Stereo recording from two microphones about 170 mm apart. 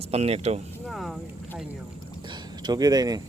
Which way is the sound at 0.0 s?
35° right (ahead or behind).